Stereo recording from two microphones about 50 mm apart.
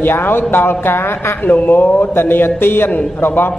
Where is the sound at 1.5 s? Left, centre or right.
Left.